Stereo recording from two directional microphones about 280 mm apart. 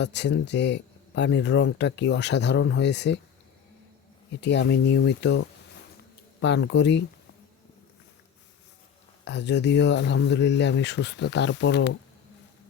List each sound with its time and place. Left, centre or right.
0.0 s speech: left
4.4 s speech: left
6.4 s speech: left
9.2 s speech: left